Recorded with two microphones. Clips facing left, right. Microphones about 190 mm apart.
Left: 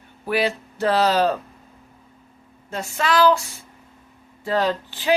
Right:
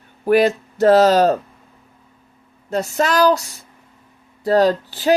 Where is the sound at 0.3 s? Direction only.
45° right (ahead or behind).